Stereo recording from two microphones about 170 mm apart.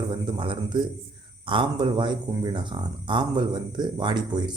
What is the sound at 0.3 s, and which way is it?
Speech, 30° right (ahead or behind).